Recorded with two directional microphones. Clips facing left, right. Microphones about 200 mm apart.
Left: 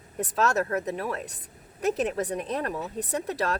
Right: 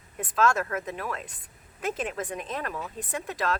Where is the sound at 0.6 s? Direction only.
40° left (ahead or behind).